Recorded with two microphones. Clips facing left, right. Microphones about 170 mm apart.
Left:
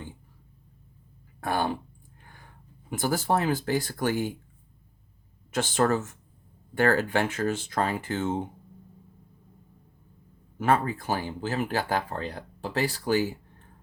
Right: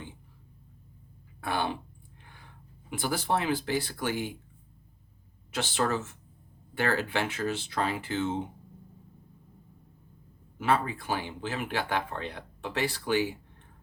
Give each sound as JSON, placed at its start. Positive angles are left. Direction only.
{"t": 1.4, "sound": "speech", "side_deg": 45}
{"t": 2.9, "sound": "speech", "side_deg": 45}
{"t": 5.5, "sound": "speech", "side_deg": 45}
{"t": 10.6, "sound": "speech", "side_deg": 45}